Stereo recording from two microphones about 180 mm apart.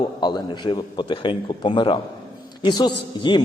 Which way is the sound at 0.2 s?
25° left (ahead or behind).